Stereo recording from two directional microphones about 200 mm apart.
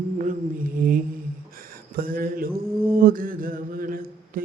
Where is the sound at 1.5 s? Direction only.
45° right (ahead or behind).